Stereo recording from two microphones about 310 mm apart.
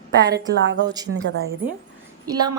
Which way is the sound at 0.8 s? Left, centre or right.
Centre.